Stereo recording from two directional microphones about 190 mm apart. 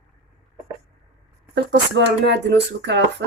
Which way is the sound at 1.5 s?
65° right (ahead or behind).